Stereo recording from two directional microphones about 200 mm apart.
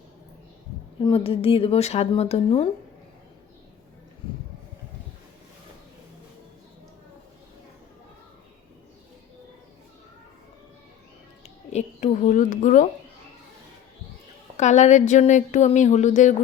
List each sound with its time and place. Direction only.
0.9 s speech: 25° left (ahead or behind)
11.4 s a sound: 35° left (ahead or behind)
14.5 s speech: 35° left (ahead or behind)